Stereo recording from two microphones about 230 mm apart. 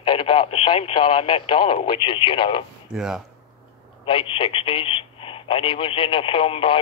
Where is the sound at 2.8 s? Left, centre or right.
Centre.